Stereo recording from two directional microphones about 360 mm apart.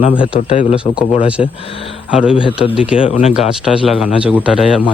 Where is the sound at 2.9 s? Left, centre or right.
Centre.